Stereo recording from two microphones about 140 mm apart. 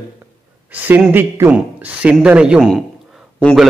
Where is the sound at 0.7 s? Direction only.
10° right (ahead or behind).